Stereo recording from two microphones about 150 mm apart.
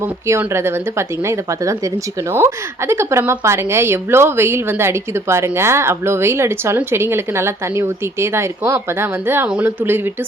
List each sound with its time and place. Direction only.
0.3 s speech: 15° right (ahead or behind)